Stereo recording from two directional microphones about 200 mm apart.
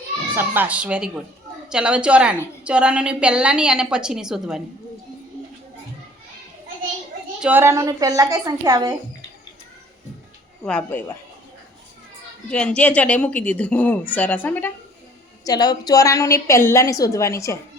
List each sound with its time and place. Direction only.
0.3 s a woman's voice: 10° right (ahead or behind)
7.4 s a woman's voice: 10° right (ahead or behind)
10.7 s a woman's voice: 5° left (ahead or behind)
12.5 s a woman's voice: 5° left (ahead or behind)
15.4 s a woman's voice: 20° left (ahead or behind)